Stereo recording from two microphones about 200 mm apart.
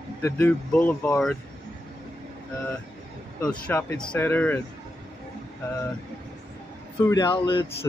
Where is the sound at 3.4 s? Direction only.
5° left (ahead or behind).